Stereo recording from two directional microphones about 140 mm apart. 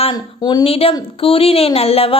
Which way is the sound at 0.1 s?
30° left (ahead or behind).